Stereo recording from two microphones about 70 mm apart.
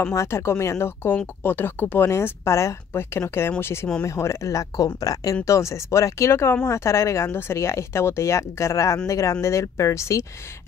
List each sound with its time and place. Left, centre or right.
0.1 s speech: left